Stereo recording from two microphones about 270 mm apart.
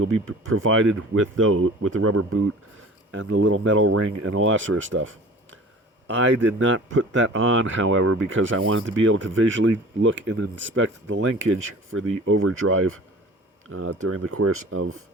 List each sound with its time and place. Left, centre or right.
0.0 s speech: right
3.1 s speech: right